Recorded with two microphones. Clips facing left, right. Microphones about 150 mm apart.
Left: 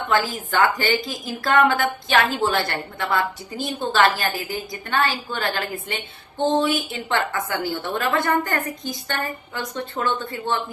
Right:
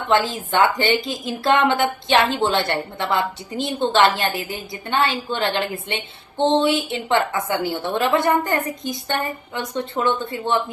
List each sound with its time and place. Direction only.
0.1 s a woman's voice: 25° right (ahead or behind)